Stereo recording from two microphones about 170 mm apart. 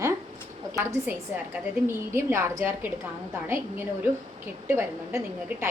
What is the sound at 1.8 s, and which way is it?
A woman's voice, 15° right (ahead or behind).